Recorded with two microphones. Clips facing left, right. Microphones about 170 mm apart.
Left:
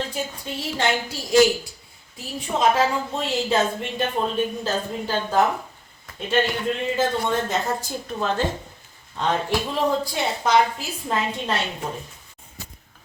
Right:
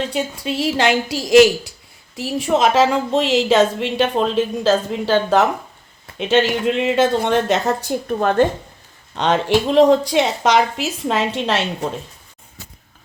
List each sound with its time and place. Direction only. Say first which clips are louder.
0.1 s a woman's voice: right 7 dB; 80° right; by 8.4 s 55° right (ahead or behind)
9.1 s a woman's voice: right 7 dB; 85° right